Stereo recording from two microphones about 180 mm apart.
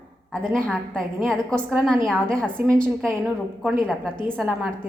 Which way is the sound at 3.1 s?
5° right (ahead or behind).